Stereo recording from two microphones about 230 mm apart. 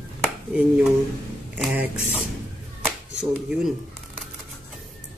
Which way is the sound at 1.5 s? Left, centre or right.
Centre.